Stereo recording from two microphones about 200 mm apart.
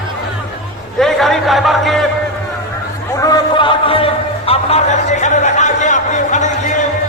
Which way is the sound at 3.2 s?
20° left (ahead or behind).